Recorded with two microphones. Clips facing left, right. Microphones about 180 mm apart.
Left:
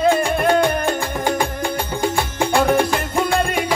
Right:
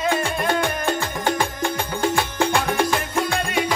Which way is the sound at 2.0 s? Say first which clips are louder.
Even; 15° left (ahead or behind).